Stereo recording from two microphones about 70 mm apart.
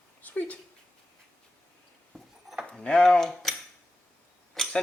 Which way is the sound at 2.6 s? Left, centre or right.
Centre.